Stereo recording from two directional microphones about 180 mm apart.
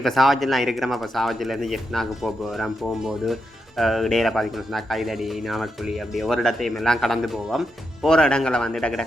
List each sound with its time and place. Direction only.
0.0 s speech: centre (ahead or behind)